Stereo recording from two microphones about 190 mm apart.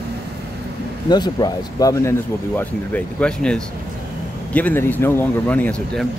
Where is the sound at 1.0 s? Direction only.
20° left (ahead or behind); by 6.0 s 5° left (ahead or behind).